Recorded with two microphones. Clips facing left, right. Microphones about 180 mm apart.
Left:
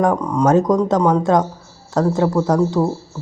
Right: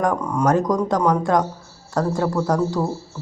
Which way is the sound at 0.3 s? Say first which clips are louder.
Left 4 dB; 20° left (ahead or behind).